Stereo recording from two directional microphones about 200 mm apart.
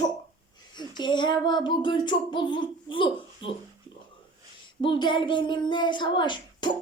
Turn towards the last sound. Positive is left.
turn(degrees=25)  # may be behind; listen again after turning